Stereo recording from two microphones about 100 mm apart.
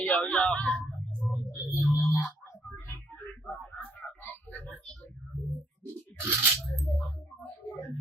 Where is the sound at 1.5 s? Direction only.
30° left (ahead or behind).